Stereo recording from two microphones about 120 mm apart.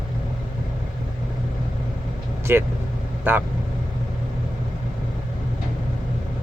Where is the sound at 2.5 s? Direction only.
20° right (ahead or behind).